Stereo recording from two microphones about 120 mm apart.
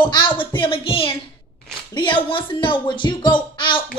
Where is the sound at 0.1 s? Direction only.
40° left (ahead or behind).